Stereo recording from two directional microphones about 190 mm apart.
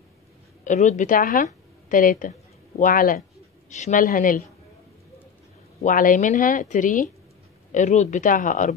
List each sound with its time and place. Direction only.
0.7 s a woman's voice: 40° left (ahead or behind)
5.8 s speech: 45° left (ahead or behind)